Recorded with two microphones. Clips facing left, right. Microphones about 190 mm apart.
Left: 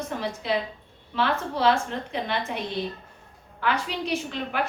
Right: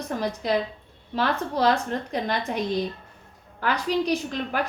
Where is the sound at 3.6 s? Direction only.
40° right (ahead or behind).